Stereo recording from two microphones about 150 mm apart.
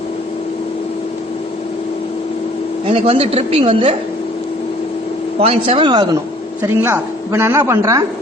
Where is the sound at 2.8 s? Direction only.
40° right (ahead or behind).